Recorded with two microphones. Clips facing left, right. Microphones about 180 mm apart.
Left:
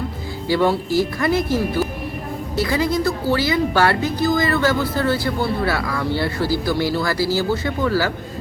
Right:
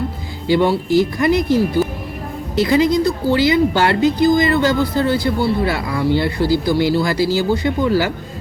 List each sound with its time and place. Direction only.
0.4 s speech: 20° right (ahead or behind)
2.6 s a woman's voice: 20° right (ahead or behind)